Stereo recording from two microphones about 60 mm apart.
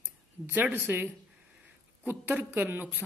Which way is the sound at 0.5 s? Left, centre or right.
Right.